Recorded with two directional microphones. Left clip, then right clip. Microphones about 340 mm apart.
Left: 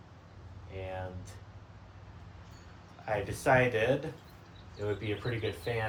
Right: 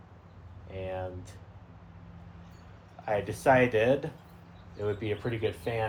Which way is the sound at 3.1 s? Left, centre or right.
Right.